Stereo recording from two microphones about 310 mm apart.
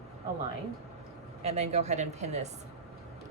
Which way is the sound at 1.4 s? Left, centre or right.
Right.